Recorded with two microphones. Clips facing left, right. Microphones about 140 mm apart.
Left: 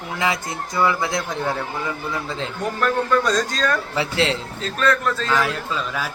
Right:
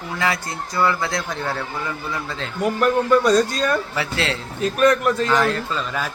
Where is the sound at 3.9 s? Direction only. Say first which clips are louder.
Left 3 dB; 20° left (ahead or behind).